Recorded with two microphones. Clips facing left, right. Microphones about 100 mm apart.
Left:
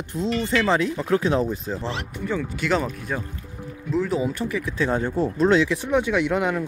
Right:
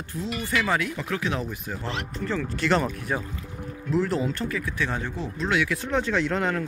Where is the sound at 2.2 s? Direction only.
10° left (ahead or behind).